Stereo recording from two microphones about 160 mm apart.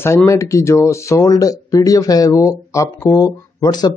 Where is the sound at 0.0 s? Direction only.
15° left (ahead or behind).